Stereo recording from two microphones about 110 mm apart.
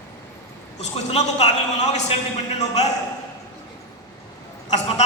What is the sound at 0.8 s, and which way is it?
A man's voice, 75° left (ahead or behind).